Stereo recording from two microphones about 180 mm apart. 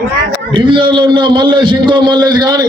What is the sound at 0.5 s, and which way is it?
A man's voice, 25° right (ahead or behind).